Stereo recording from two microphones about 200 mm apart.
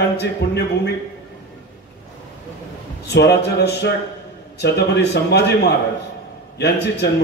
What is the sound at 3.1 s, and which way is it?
Speech, 55° left (ahead or behind).